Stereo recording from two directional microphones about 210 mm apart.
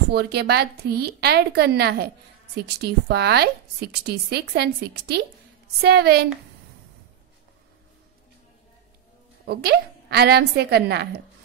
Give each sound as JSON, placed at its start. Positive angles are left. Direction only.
{"t": 0.1, "sound": "a woman's voice", "side_deg": -50}
{"t": 9.5, "sound": "a woman's voice", "side_deg": -50}